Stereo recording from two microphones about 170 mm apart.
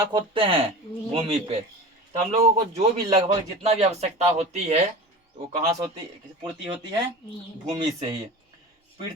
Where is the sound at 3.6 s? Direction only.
40° right (ahead or behind).